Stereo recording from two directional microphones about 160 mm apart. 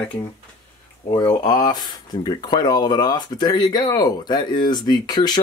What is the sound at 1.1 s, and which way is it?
Speech, 25° left (ahead or behind).